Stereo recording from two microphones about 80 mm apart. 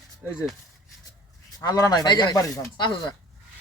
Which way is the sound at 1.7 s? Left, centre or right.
Left.